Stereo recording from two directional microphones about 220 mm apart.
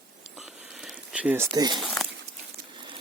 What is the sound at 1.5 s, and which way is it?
Speech, 20° right (ahead or behind).